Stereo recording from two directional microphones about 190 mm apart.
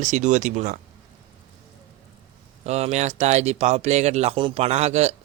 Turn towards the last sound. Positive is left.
turn(degrees=-35)  # may be behind; listen again after turning